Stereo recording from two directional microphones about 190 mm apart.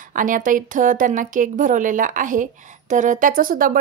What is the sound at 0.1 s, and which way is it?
Speech, 45° right (ahead or behind).